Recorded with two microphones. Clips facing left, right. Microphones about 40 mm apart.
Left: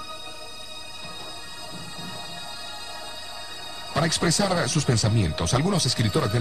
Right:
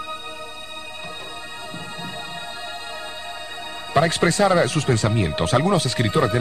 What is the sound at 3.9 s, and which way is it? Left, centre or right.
Speech, right.